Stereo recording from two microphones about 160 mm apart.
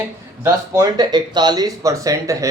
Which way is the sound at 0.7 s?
25° right (ahead or behind).